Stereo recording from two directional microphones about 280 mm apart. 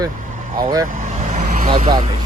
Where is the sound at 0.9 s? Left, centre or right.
Right.